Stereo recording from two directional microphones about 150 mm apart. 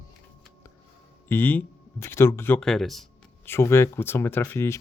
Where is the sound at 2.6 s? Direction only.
5° left (ahead or behind).